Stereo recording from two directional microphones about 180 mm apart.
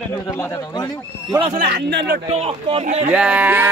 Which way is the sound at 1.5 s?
60° right (ahead or behind).